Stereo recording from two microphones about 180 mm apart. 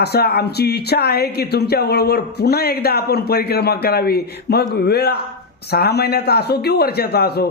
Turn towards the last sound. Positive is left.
turn(degrees=60)  # may be behind; listen again after turning